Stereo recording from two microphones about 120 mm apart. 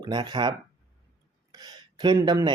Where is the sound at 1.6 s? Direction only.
35° right (ahead or behind).